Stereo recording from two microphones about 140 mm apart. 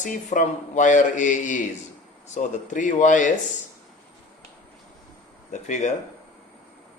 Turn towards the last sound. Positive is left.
turn(degrees=60)  # may be behind; listen again after turning